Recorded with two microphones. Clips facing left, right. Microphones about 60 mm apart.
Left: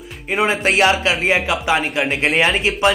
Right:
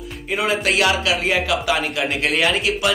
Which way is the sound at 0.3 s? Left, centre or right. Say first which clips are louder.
Left 3 dB; left.